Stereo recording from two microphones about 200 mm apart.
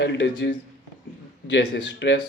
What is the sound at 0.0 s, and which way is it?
Speech, 65° left (ahead or behind).